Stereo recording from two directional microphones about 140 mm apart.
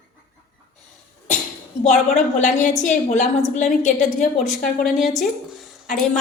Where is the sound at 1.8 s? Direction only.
60° left (ahead or behind).